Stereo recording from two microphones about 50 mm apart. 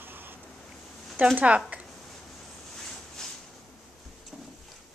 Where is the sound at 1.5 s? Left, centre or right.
Right.